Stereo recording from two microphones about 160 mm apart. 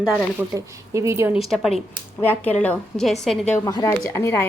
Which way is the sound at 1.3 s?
Centre (ahead or behind).